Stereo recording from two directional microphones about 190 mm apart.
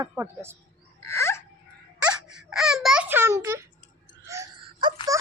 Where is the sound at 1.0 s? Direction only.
15° left (ahead or behind).